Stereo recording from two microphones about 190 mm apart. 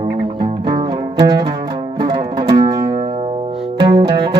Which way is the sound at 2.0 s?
25° right (ahead or behind).